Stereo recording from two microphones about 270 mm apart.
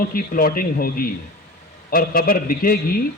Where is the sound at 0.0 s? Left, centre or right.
Left.